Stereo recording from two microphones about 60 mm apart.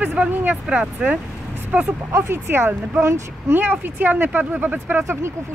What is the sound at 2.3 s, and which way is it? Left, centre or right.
Speech, right.